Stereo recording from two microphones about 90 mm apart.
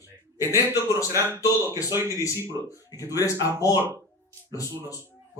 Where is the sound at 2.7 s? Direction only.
40° left (ahead or behind).